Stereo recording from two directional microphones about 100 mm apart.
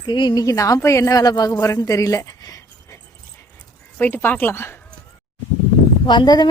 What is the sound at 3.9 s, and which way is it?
Speech, 20° left (ahead or behind).